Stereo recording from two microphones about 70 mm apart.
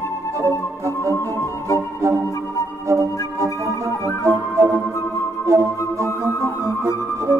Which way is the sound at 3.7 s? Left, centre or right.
Left.